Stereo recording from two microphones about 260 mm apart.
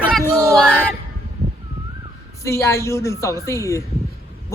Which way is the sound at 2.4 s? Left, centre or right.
Centre.